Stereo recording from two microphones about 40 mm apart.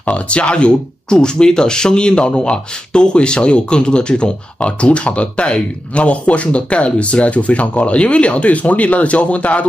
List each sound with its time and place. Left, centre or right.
0.0 s speech: left